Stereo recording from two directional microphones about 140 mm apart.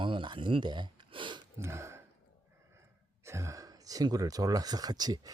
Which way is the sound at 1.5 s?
20° right (ahead or behind).